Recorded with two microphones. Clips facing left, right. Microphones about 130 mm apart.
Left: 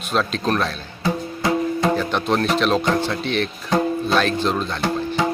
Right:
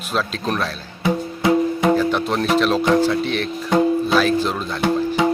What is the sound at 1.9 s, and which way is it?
Speech, 5° right (ahead or behind).